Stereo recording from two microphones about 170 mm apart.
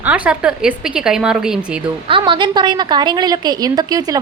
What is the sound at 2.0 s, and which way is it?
Speech, 30° right (ahead or behind).